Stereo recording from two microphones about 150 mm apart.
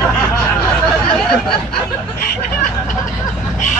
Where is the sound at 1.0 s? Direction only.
5° left (ahead or behind).